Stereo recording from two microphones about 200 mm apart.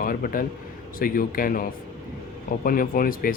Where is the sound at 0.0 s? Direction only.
45° left (ahead or behind).